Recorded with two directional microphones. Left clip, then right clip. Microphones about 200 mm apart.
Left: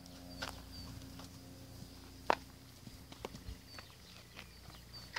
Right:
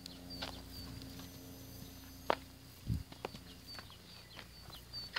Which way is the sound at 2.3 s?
20° left (ahead or behind).